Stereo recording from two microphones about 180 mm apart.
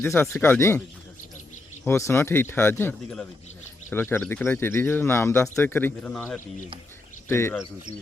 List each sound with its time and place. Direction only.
0.2 s speech: 10° left (ahead or behind)
1.9 s speech: 15° left (ahead or behind)